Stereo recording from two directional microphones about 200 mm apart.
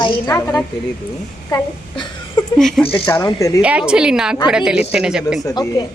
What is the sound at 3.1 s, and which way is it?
Speech, 15° left (ahead or behind).